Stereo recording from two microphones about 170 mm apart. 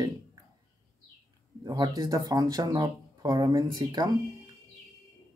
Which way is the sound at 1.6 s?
20° right (ahead or behind).